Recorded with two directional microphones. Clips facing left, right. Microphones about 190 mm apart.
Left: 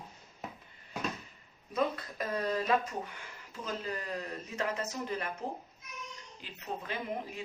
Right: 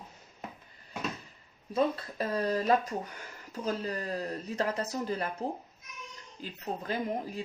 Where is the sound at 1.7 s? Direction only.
35° right (ahead or behind).